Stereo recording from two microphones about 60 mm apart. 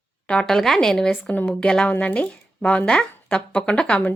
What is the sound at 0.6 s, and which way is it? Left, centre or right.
A woman's voice, centre.